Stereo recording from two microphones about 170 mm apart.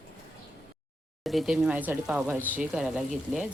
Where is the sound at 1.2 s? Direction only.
Centre (ahead or behind).